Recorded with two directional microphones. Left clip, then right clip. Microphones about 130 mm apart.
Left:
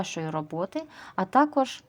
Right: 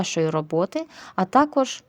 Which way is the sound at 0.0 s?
35° right (ahead or behind).